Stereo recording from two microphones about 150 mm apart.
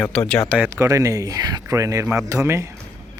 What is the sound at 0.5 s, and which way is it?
Speech, 10° right (ahead or behind).